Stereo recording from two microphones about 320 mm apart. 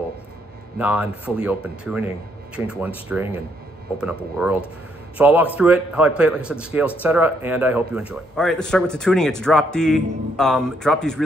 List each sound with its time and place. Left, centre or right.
0.7 s speech: centre